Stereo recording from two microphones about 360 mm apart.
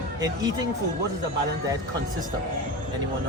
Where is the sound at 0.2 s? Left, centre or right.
Centre.